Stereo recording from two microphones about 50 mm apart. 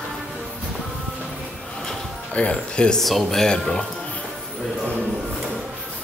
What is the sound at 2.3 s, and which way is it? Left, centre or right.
Speech, left.